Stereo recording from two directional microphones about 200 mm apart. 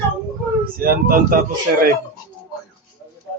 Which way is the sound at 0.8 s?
45° right (ahead or behind).